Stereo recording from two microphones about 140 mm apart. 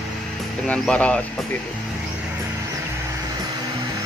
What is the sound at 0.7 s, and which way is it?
Speech, 10° left (ahead or behind).